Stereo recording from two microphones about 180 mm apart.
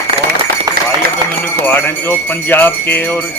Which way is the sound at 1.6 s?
10° left (ahead or behind).